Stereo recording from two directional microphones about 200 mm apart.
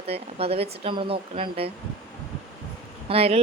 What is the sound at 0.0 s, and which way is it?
Speech, 30° right (ahead or behind).